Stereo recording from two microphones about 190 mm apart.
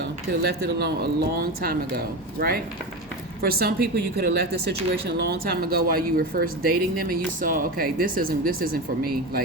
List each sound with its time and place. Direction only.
0.8 s speech: 55° right (ahead or behind)